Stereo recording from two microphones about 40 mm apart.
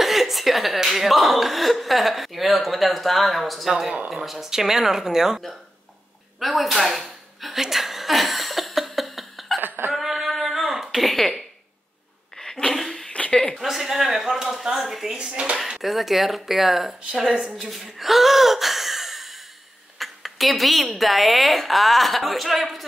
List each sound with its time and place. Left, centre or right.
0.0 s speech: centre
6.4 s speech: centre
9.6 s a sound: right
9.9 s a sound: centre
11.0 s speech: centre
12.4 s a sound: centre
12.7 s a sound: centre
13.3 s a woman's voice: left
13.6 s speech: centre
15.0 s speech: right
15.8 s speech: centre
17.6 s speech: centre